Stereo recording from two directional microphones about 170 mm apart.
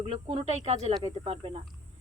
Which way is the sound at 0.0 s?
40° right (ahead or behind).